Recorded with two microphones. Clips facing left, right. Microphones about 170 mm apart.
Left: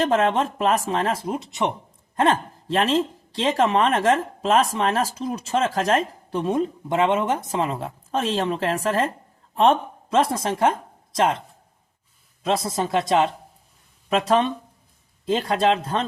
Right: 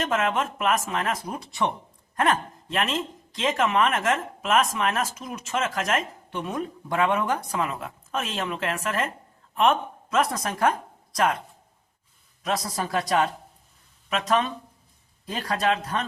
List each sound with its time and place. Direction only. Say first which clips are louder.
0.0 s a woman's voice: left 5 dB; 30° left (ahead or behind)